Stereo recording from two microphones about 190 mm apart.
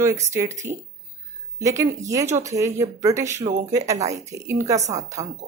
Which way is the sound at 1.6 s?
15° right (ahead or behind).